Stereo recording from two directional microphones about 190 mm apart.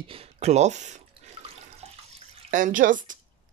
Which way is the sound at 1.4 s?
35° right (ahead or behind).